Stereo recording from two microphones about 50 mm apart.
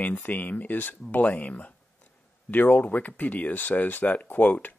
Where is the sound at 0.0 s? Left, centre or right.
Left.